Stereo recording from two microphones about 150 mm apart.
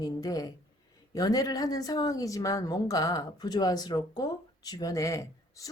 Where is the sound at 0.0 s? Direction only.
25° left (ahead or behind).